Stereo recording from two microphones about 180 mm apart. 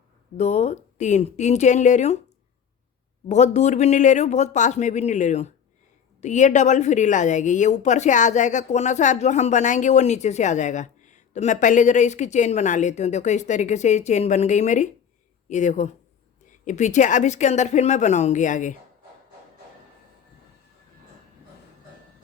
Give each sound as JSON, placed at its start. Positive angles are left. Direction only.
{"t": 0.3, "sound": "a woman's voice", "side_deg": 40}
{"t": 3.2, "sound": "a woman's voice", "side_deg": 40}